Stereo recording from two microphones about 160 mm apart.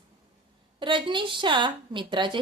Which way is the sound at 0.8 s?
30° right (ahead or behind).